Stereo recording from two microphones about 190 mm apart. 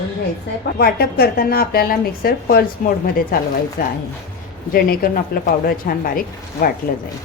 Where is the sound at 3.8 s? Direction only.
55° left (ahead or behind).